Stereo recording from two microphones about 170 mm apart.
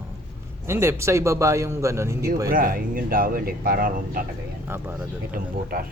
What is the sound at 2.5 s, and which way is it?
Speech, 55° right (ahead or behind).